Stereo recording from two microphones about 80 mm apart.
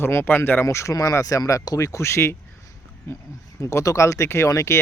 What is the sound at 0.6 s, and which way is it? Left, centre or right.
Speech, left.